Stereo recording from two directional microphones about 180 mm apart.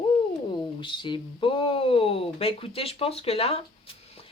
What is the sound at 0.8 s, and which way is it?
Speech, 25° left (ahead or behind).